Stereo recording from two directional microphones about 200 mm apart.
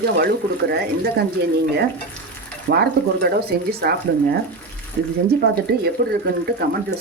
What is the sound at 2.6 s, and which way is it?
Speech, 55° right (ahead or behind).